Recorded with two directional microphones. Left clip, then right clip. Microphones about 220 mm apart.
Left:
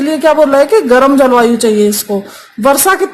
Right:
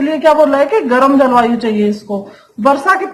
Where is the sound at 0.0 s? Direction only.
55° left (ahead or behind).